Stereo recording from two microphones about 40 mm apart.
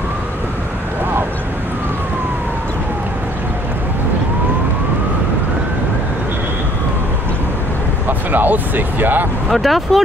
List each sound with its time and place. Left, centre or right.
8.1 s speech: right
9.5 s speech: centre